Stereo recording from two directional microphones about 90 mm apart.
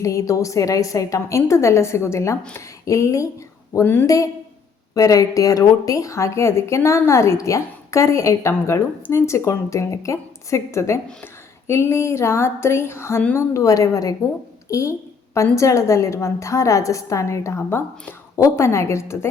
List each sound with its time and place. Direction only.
0.0 s a woman's voice: 35° left (ahead or behind)
17.7 s a woman's voice: 20° left (ahead or behind)
18.3 s a woman's voice: 30° left (ahead or behind)